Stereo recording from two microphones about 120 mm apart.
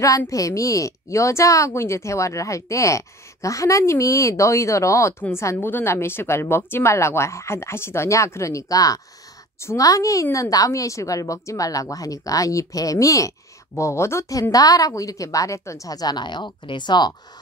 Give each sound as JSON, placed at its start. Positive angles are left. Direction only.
{"t": 0.0, "sound": "a woman's voice", "side_deg": 30}